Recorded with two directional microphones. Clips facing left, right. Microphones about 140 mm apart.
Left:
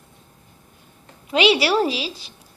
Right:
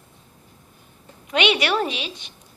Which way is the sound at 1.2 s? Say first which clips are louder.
Left 3 dB; 30° left (ahead or behind).